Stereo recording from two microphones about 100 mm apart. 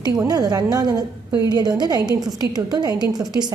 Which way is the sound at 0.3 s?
40° right (ahead or behind).